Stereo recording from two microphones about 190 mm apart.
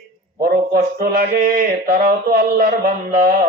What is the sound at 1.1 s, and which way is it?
A man's voice, 55° right (ahead or behind).